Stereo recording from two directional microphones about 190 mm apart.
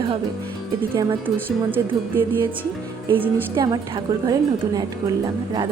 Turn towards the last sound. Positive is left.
turn(degrees=-20)  # may be behind; listen again after turning